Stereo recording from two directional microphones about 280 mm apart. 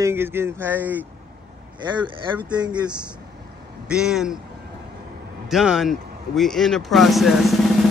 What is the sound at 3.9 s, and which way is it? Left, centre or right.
Speech, centre.